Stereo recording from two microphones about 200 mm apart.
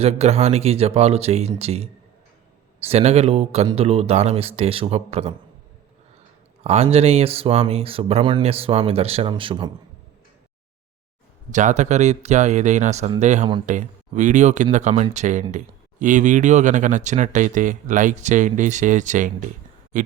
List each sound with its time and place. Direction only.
0.0 s speech: 30° right (ahead or behind)
6.6 s speech: 30° right (ahead or behind)
11.5 s speech: 35° right (ahead or behind)